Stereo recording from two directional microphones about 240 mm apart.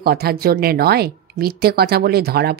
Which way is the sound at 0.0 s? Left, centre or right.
Right.